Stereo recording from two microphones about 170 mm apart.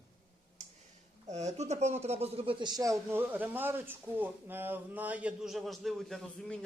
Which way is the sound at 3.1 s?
10° right (ahead or behind).